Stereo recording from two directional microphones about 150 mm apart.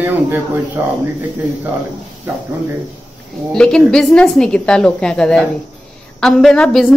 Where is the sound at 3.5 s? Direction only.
5° left (ahead or behind).